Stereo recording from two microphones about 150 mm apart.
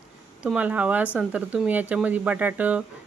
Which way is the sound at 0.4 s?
10° right (ahead or behind).